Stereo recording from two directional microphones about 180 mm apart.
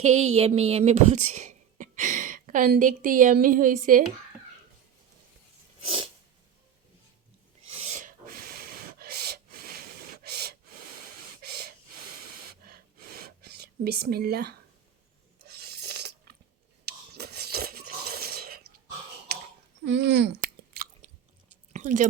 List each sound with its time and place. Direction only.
0.0 s speech: 35° right (ahead or behind)
7.7 s gasp: 35° right (ahead or behind); by 11.7 s 60° right (ahead or behind)
13.4 s speech: 65° right (ahead or behind)
15.4 s a sound: 60° right (ahead or behind)
19.8 s speech: 75° right (ahead or behind)
21.7 s chewing: 45° right (ahead or behind)